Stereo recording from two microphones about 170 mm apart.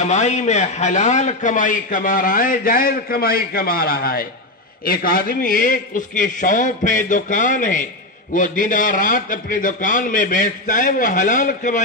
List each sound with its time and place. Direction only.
0.0 s a man's voice: 45° left (ahead or behind)